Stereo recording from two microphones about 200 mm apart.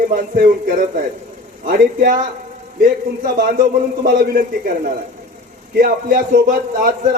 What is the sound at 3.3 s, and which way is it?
A man's voice, 45° right (ahead or behind).